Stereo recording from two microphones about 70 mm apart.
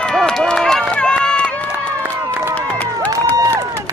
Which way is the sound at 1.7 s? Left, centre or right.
Right.